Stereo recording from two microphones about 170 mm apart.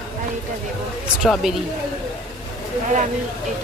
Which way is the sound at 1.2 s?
5° right (ahead or behind).